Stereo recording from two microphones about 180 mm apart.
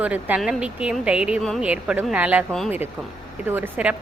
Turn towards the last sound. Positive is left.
turn(degrees=-10)  # may be behind; listen again after turning